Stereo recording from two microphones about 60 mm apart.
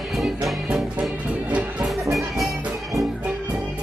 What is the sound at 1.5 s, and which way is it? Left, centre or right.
Music, right.